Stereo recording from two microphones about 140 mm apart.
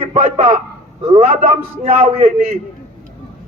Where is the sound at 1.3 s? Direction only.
55° right (ahead or behind).